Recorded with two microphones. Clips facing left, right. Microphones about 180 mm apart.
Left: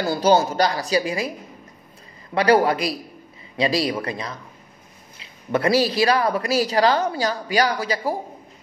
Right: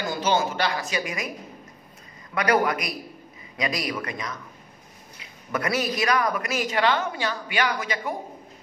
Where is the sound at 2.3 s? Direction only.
30° left (ahead or behind).